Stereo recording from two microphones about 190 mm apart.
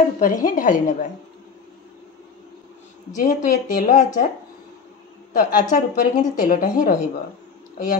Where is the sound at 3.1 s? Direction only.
45° left (ahead or behind).